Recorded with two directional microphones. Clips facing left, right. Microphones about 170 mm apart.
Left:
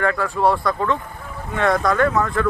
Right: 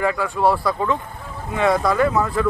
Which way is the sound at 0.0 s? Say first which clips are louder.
Even; 5° right (ahead or behind).